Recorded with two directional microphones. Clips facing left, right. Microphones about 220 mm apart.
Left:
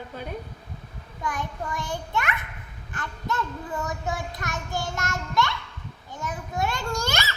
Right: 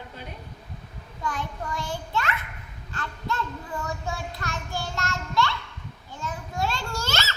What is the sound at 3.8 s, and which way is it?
Child singing, 20° left (ahead or behind).